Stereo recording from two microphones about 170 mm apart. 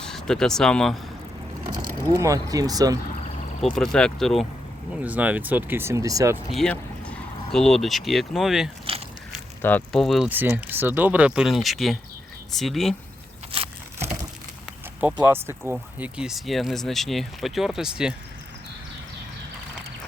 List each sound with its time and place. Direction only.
0.0 s speech: 5° left (ahead or behind)
2.2 s speech: 20° right (ahead or behind)
3.6 s speech: centre (ahead or behind)
5.0 s speech: 10° right (ahead or behind)
6.5 s speech: 5° left (ahead or behind)
9.6 s speech: 10° left (ahead or behind)
13.5 s crunch: 35° right (ahead or behind)
15.2 s speech: 10° right (ahead or behind)